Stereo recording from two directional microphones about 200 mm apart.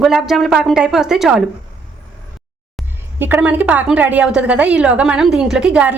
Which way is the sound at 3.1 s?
10° right (ahead or behind).